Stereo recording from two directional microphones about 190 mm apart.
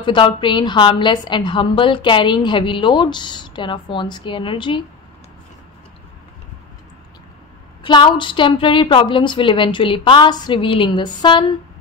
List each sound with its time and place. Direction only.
0.0 s a woman's voice: 25° left (ahead or behind)
7.8 s a woman's voice: 25° left (ahead or behind)